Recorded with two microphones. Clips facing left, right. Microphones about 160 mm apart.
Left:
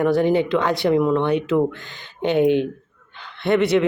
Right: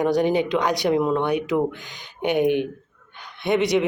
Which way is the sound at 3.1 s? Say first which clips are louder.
Left 3 dB; 15° right (ahead or behind).